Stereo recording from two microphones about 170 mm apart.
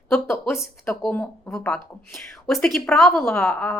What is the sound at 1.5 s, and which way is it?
Speech, 5° left (ahead or behind).